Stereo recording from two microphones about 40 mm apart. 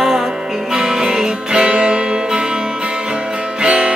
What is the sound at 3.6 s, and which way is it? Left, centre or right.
Music, right.